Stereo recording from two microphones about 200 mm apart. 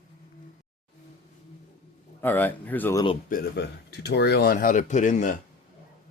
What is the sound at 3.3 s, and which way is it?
Speech, 55° left (ahead or behind).